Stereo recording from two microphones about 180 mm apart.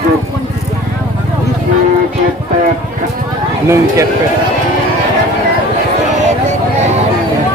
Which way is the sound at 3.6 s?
15° right (ahead or behind).